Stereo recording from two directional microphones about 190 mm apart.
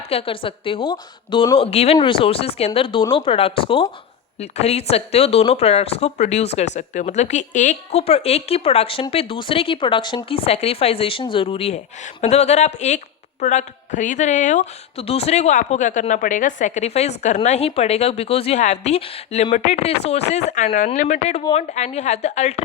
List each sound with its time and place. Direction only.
0.1 s a woman's voice: 30° left (ahead or behind)